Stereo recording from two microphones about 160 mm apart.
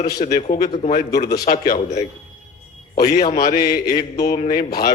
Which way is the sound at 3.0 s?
70° left (ahead or behind).